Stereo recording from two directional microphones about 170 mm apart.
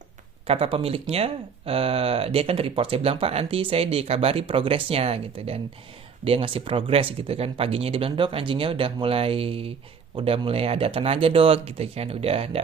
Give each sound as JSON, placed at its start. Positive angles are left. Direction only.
{"t": 0.4, "sound": "speech", "side_deg": -35}